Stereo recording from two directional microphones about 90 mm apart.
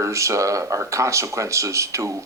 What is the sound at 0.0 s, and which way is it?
Speech, 35° right (ahead or behind).